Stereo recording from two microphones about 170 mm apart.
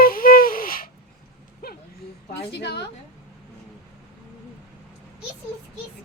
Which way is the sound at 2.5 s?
80° left.